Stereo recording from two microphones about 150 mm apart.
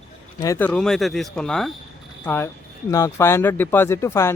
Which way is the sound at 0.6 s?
5° left (ahead or behind).